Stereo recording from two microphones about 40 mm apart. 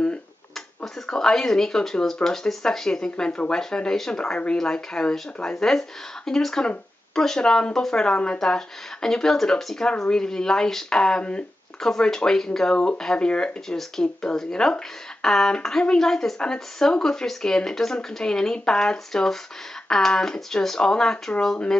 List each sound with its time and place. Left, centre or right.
1.0 s speech: centre
9.8 s speech: centre